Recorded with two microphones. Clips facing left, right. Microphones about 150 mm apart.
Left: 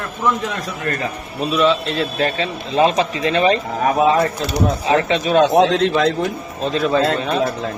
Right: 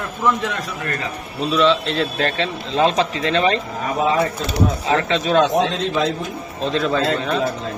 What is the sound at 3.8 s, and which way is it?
Speech, 65° left (ahead or behind).